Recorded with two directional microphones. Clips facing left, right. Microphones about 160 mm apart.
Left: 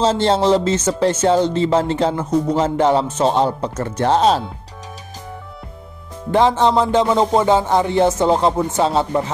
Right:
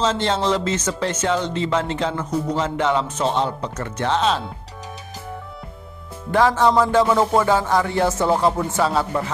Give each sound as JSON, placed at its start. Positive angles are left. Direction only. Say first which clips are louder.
{"t": 0.0, "sound": "speech", "louder": "left 5 dB", "side_deg": 30}
{"t": 6.3, "sound": "music", "louder": "left 2 dB", "side_deg": 25}